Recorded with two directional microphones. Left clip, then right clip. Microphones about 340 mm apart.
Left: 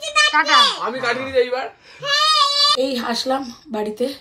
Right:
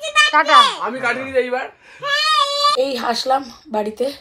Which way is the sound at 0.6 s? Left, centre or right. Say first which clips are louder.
Even; right.